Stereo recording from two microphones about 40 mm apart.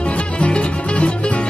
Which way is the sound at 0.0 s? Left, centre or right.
Left.